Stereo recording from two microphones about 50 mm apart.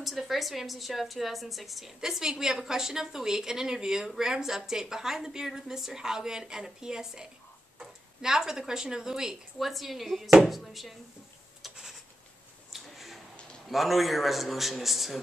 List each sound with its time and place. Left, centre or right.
0.0 s a woman's voice: centre
12.7 s a sound: centre
13.7 s a woman's voice: centre